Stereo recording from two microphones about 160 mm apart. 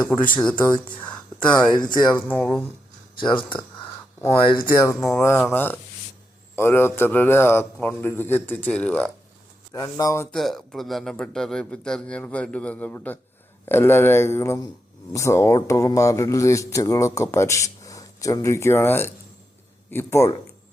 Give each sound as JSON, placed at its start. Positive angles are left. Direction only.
{"t": 0.0, "sound": "a man's voice", "side_deg": 10}
{"t": 3.2, "sound": "speech", "side_deg": 30}
{"t": 4.7, "sound": "a man's voice", "side_deg": 20}
{"t": 9.7, "sound": "speech", "side_deg": 20}
{"t": 10.3, "sound": "a man's voice", "side_deg": 0}